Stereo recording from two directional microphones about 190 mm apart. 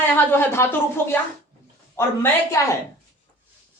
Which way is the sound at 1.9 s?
15° left (ahead or behind).